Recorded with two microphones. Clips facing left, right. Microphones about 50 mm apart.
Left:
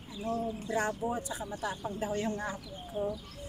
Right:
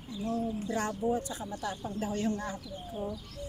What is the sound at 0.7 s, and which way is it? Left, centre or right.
Speech, centre.